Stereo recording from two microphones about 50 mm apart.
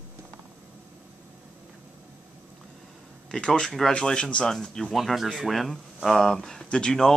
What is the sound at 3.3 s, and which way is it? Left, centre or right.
Speech, centre.